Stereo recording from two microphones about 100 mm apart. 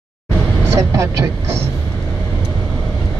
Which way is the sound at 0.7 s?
30° right (ahead or behind).